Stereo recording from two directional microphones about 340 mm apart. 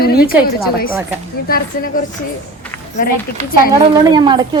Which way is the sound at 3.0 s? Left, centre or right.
Left.